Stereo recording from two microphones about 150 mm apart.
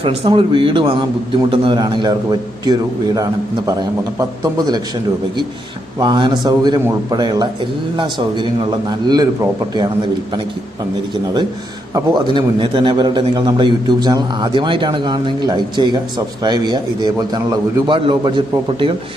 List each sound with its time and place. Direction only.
0.0 s a man's voice: 35° right (ahead or behind)
6.0 s a man's voice: 30° right (ahead or behind)
11.9 s a man's voice: 30° right (ahead or behind)